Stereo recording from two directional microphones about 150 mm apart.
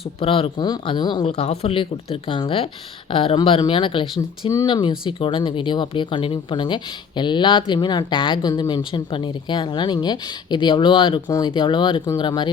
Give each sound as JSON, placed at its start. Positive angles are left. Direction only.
{"t": 0.2, "sound": "speech", "side_deg": 40}
{"t": 1.2, "sound": "speech", "side_deg": 45}